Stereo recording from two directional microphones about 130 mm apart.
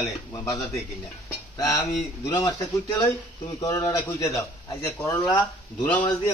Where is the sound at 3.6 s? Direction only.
30° left (ahead or behind).